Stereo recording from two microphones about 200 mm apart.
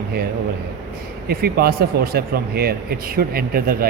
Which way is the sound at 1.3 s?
50° right (ahead or behind).